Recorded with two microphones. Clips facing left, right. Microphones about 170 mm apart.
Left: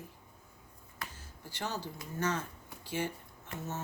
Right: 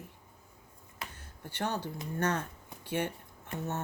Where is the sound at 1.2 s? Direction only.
60° right (ahead or behind).